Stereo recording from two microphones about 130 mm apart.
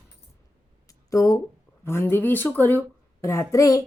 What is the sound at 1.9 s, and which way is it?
A child's voice, 15° left (ahead or behind).